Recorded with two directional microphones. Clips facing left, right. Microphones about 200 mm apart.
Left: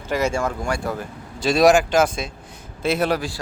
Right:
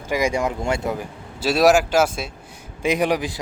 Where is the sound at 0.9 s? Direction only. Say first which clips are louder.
Even; 5° right (ahead or behind).